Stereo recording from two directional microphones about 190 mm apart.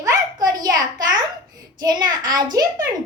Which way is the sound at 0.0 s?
20° right (ahead or behind).